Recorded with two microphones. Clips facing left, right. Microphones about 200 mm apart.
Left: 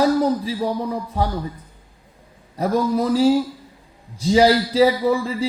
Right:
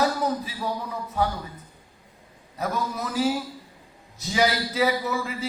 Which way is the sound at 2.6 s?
30° left (ahead or behind).